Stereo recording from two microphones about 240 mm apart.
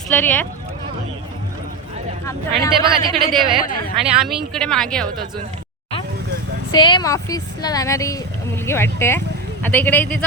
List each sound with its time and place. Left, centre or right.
0.1 s speech: centre
2.5 s speech: right
3.9 s speech: centre
6.7 s speech: centre